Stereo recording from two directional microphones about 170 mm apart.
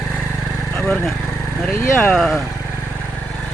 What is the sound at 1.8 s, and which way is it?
Speech, 15° left (ahead or behind).